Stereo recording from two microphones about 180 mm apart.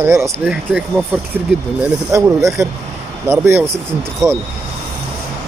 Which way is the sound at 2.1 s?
15° right (ahead or behind).